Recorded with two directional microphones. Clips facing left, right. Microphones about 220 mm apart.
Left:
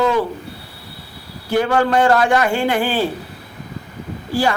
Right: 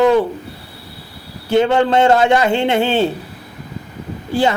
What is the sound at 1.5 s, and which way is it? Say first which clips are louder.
Speech: right 3 dB; 25° right (ahead or behind).